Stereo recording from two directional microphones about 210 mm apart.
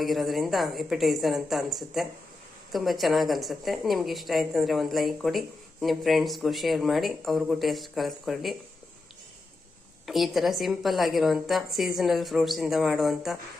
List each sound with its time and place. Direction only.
0.0 s a woman's voice: centre (ahead or behind)
10.1 s a woman's voice: centre (ahead or behind)